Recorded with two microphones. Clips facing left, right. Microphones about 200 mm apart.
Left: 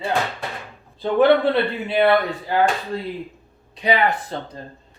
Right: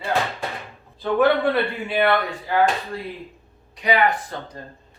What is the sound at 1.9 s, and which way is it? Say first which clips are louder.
Speech: left 4 dB; 25° left (ahead or behind).